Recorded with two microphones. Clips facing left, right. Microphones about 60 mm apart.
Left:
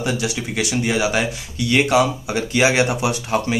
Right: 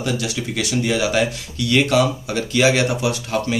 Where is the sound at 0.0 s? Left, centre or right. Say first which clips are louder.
Left 1 dB; centre.